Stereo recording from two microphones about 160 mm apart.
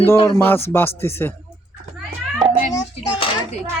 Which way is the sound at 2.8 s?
25° left (ahead or behind).